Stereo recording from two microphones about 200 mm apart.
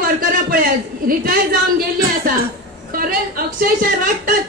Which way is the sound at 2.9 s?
45° right (ahead or behind).